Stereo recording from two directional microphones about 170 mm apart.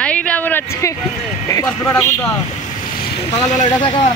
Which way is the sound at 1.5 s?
15° left (ahead or behind).